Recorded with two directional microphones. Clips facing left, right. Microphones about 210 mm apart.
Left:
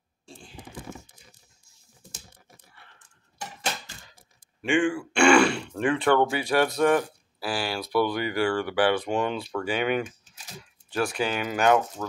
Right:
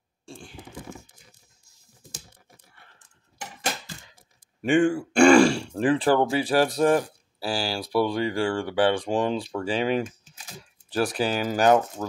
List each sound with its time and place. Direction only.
4.6 s speech: 40° right (ahead or behind)